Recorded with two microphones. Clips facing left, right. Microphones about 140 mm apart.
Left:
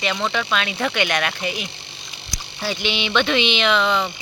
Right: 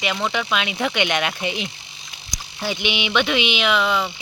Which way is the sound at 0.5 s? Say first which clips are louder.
Even; 15° right (ahead or behind).